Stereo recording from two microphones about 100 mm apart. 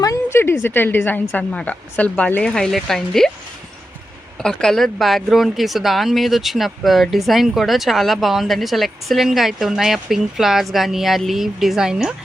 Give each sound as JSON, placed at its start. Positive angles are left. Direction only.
{"t": 0.0, "sound": "a sound", "side_deg": 35}
{"t": 0.3, "sound": "a woman's voice", "side_deg": 25}
{"t": 4.4, "sound": "speech", "side_deg": 5}